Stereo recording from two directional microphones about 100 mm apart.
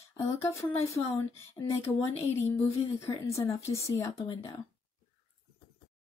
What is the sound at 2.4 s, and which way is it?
Speech, 25° left (ahead or behind).